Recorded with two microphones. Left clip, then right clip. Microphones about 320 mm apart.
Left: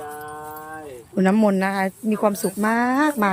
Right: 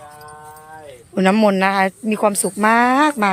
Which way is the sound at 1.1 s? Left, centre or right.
Centre.